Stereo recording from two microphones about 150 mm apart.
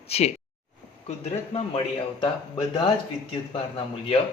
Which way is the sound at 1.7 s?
35° left (ahead or behind).